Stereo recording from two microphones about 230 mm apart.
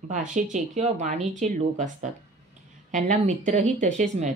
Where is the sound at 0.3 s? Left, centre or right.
Right.